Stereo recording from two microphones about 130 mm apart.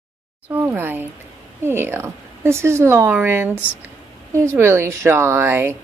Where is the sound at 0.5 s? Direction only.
15° right (ahead or behind).